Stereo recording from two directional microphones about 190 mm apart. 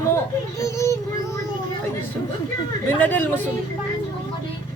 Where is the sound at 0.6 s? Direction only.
15° left (ahead or behind).